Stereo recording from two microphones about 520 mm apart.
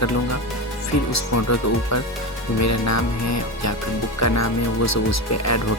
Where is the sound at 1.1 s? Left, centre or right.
Left.